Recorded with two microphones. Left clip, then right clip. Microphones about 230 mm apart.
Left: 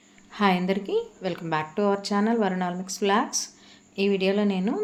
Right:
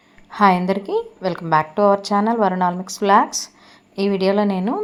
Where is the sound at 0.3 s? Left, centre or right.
Centre.